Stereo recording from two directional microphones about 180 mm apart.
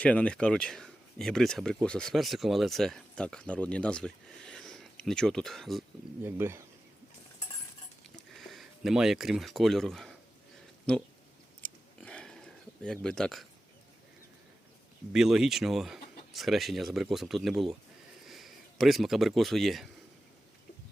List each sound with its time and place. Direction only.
0.0 s speech: 5° left (ahead or behind)
6.2 s speech: 10° right (ahead or behind)
8.3 s speech: centre (ahead or behind)
11.6 s a sound: 5° left (ahead or behind)
15.1 s speech: 5° right (ahead or behind)